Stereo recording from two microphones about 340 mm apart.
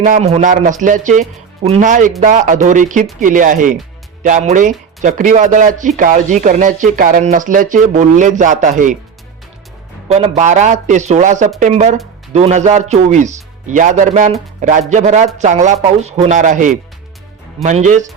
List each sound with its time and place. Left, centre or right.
0.0 s speech: centre
10.1 s speech: centre